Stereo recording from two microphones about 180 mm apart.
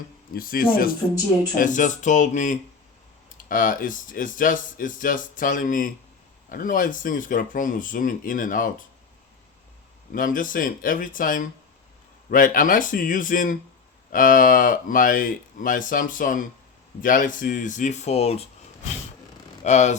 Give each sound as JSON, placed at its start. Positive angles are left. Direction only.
{"t": 0.3, "sound": "speech", "side_deg": 55}
{"t": 10.1, "sound": "speech", "side_deg": 50}
{"t": 19.6, "sound": "speech", "side_deg": 40}